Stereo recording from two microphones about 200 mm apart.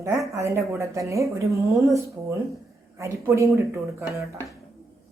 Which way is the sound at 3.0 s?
15° right (ahead or behind).